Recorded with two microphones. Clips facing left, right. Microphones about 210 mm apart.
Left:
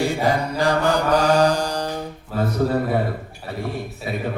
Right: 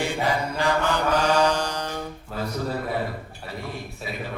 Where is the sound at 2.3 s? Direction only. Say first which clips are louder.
Left 7 dB; centre (ahead or behind).